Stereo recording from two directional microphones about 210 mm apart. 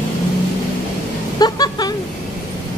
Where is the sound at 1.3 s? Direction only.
20° left (ahead or behind).